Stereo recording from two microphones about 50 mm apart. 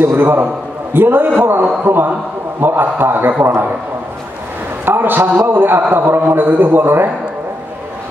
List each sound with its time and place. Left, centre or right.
0.0 s a man's voice: right
4.8 s a man's voice: right